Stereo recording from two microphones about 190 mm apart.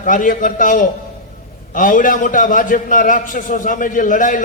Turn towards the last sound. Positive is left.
turn(degrees=45)  # may be behind; listen again after turning